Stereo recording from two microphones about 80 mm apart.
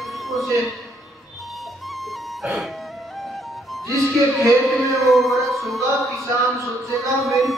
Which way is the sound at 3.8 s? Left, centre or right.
Right.